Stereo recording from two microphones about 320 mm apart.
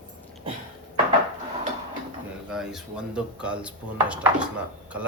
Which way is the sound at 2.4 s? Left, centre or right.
Centre.